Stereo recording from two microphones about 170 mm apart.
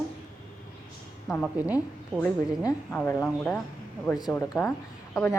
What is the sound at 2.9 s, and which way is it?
Speech, 10° left (ahead or behind).